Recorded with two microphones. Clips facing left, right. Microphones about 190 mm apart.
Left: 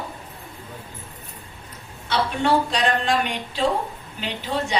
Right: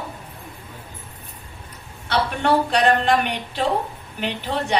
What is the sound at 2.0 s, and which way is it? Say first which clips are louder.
A woman's voice: right 1 dB; 60° right (ahead or behind).